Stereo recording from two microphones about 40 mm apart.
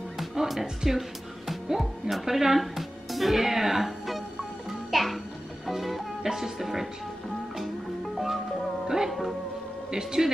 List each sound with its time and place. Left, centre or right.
0.2 s music: centre
1.7 s speech: centre
4.6 s music: centre
8.8 s music: centre
9.8 s speech: centre